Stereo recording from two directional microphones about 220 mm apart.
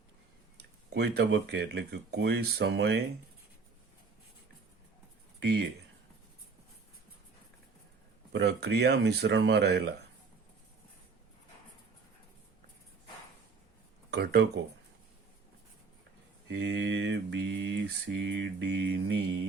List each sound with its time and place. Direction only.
0.5 s mantra: 50° right (ahead or behind)
5.4 s a sound: 50° right (ahead or behind)
8.3 s mantra: 50° right (ahead or behind)
14.1 s mantra: 45° right (ahead or behind)
16.5 s mantra: 50° right (ahead or behind)